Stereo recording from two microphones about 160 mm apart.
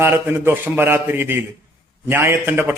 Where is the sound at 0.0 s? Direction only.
15° right (ahead or behind).